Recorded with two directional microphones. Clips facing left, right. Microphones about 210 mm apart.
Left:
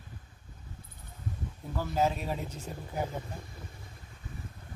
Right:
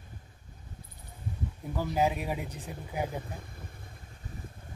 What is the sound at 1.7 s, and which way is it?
Speech, 15° right (ahead or behind).